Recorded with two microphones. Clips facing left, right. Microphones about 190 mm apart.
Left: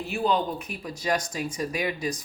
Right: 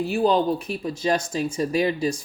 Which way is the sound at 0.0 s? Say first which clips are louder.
Right 6 dB; 35° right (ahead or behind).